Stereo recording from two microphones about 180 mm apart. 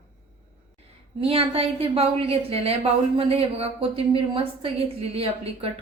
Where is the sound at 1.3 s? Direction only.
30° right (ahead or behind).